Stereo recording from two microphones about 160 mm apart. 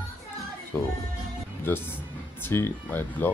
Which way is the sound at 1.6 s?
15° left (ahead or behind).